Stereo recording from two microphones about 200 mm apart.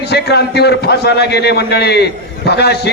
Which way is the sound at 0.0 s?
55° left (ahead or behind).